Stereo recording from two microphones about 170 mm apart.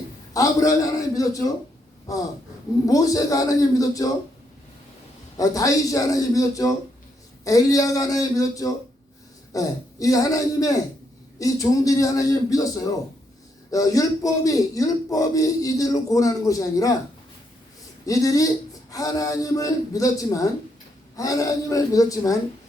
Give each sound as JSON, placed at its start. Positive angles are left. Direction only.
{"t": 0.3, "sound": "a man's voice", "side_deg": 20}
{"t": 2.8, "sound": "a man's voice", "side_deg": 20}
{"t": 5.4, "sound": "a man's voice", "side_deg": 20}
{"t": 13.7, "sound": "a man's voice", "side_deg": 20}
{"t": 18.0, "sound": "a man's voice", "side_deg": 20}